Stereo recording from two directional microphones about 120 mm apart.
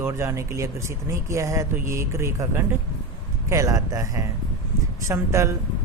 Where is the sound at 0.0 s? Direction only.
20° right (ahead or behind).